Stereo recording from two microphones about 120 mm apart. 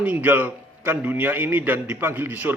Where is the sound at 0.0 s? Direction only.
15° right (ahead or behind).